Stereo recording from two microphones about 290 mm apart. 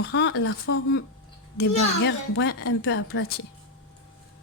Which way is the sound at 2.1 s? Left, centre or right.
Left.